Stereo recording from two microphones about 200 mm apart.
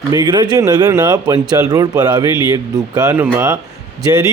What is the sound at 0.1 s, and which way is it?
Speech, 20° right (ahead or behind).